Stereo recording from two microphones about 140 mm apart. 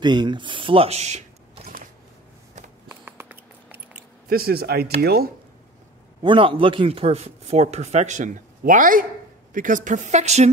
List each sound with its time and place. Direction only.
0.0 s speech: 30° right (ahead or behind); by 1.7 s 50° right (ahead or behind)
2.9 s a sound: 15° right (ahead or behind)
4.3 s speech: 90° right
6.2 s a woman's voice: 40° right (ahead or behind); by 10.5 s 55° right (ahead or behind)